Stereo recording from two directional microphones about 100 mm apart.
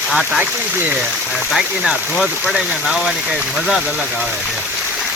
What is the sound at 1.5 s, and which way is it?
Speech, centre (ahead or behind).